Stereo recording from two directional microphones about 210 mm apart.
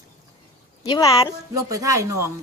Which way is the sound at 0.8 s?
20° left (ahead or behind).